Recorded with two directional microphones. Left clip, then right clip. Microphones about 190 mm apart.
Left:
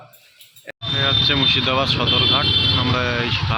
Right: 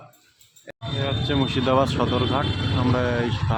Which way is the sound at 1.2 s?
20° right (ahead or behind).